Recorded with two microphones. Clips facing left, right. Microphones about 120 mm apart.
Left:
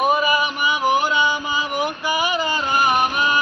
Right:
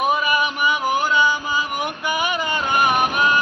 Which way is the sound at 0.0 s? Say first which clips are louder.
Left 1 dB; centre (ahead or behind).